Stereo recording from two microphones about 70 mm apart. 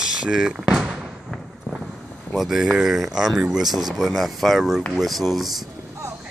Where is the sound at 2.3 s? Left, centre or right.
Centre.